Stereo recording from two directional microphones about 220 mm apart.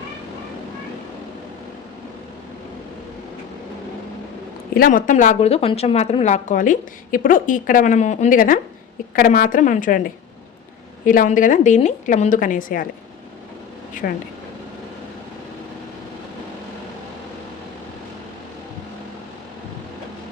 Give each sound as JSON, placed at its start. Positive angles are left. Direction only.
{"t": 4.7, "sound": "speech", "side_deg": 40}
{"t": 14.0, "sound": "speech", "side_deg": 40}